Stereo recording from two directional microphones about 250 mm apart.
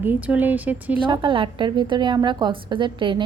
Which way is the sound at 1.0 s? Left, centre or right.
Centre.